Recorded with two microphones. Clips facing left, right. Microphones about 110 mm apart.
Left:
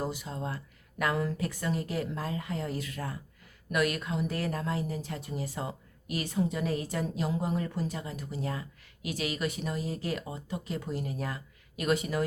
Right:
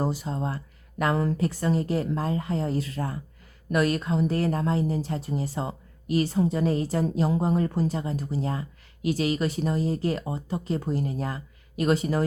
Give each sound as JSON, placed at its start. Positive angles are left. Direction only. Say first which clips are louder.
{"t": 0.0, "sound": "speech", "louder": "right 6 dB", "side_deg": -35}